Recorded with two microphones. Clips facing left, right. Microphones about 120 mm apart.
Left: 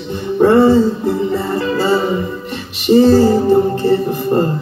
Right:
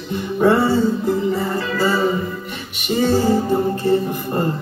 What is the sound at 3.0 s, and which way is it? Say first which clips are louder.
Music: left 7 dB; 30° left (ahead or behind).